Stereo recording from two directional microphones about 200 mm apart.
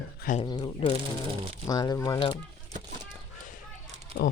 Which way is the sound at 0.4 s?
20° left (ahead or behind).